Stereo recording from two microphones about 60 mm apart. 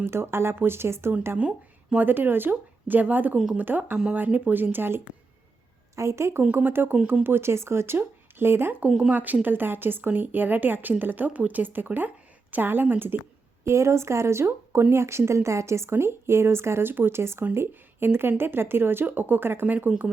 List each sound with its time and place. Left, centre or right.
0.0 s speech: right
1.4 s a sound: centre
2.0 s speech: right
3.3 s speech: centre
3.6 s speech: right
6.0 s speech: right
6.5 s speech: right
13.7 s speech: right